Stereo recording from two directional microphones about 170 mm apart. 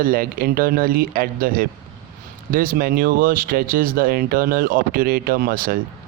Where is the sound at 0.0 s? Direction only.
60° right (ahead or behind).